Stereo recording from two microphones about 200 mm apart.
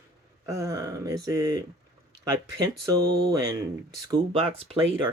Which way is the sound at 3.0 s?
50° right (ahead or behind).